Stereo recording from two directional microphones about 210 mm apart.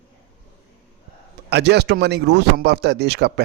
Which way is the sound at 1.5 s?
50° right (ahead or behind).